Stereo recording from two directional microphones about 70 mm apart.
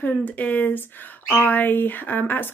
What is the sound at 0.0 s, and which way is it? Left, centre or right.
Speech, left.